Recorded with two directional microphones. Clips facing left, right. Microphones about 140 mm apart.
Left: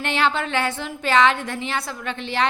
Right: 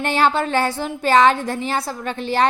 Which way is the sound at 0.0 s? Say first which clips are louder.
Right 4 dB; 40° right (ahead or behind).